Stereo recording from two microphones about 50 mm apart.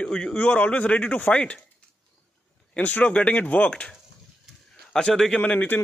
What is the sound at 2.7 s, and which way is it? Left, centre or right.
A man's voice, left.